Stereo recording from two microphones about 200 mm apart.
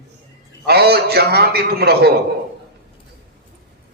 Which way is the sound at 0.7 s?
55° right (ahead or behind).